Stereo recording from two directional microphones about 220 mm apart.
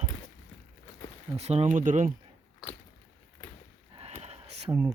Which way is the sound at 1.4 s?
25° right (ahead or behind).